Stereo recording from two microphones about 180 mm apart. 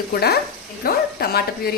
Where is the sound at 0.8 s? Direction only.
60° left (ahead or behind).